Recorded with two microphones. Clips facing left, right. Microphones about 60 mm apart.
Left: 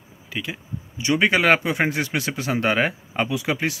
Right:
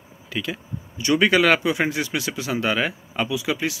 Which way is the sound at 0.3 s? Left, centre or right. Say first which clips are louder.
Right 2 dB; centre.